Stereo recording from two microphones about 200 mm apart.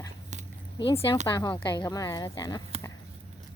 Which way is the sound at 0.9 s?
20° left (ahead or behind).